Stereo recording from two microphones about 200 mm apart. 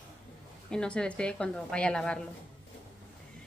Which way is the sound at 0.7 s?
5° left (ahead or behind).